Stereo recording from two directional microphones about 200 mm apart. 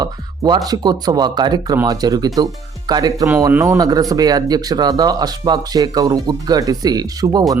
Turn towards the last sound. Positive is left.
turn(degrees=-20)  # may be behind; listen again after turning